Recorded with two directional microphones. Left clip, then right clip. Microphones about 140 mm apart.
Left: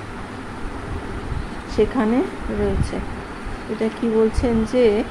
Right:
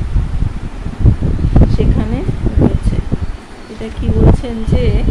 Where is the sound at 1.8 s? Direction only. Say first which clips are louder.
Left 1 dB; 45° left (ahead or behind).